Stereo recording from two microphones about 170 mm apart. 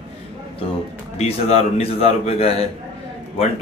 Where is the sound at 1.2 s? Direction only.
40° left (ahead or behind).